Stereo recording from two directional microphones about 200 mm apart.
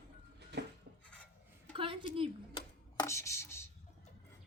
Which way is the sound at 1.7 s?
25° right (ahead or behind).